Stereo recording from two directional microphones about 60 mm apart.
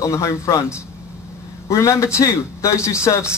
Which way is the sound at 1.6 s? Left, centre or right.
Left.